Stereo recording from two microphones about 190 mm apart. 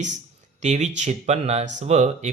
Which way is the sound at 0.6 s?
40° right (ahead or behind).